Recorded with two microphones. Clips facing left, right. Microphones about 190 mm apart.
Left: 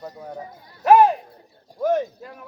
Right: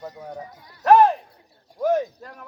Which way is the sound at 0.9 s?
10° left (ahead or behind).